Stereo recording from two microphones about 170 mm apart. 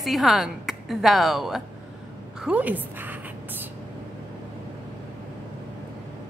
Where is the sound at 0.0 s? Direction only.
Centre (ahead or behind).